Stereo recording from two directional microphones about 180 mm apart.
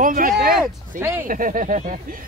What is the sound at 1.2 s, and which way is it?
Speech, 50° right (ahead or behind).